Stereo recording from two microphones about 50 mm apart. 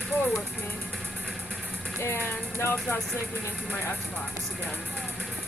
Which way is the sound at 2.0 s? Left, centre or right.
Left.